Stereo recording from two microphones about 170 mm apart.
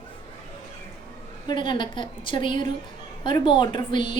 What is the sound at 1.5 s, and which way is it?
A woman's voice, 30° left (ahead or behind).